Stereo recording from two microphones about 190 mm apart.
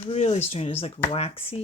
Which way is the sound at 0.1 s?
35° left (ahead or behind).